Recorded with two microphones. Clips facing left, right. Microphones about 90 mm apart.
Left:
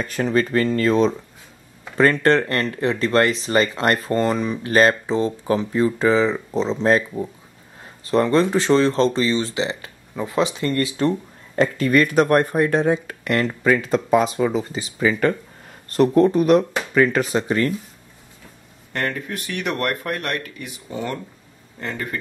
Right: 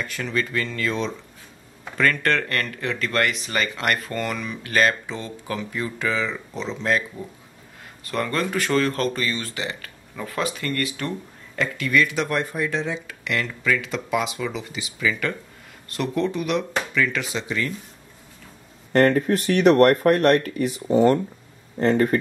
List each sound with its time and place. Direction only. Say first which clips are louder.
0.0 s speech: left 6 dB; 35° left (ahead or behind)
18.9 s speech: right 9 dB; 40° right (ahead or behind)